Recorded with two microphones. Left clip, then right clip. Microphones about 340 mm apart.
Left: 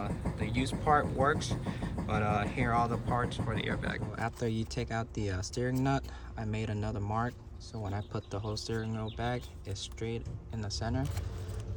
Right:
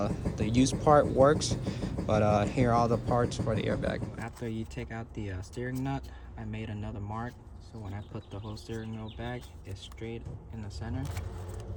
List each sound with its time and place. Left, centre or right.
0.0 s music: centre
1.3 s speech: centre